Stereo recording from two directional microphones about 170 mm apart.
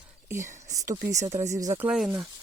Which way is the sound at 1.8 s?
5° right (ahead or behind).